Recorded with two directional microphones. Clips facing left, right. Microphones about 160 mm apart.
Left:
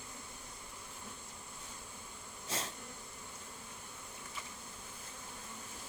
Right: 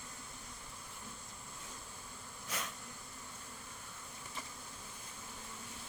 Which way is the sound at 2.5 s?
30° left (ahead or behind).